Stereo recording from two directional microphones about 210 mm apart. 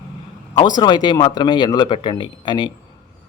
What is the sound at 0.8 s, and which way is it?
Speech, 20° left (ahead or behind).